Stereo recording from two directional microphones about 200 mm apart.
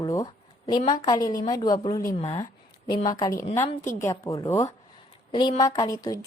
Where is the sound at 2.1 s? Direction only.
30° left (ahead or behind).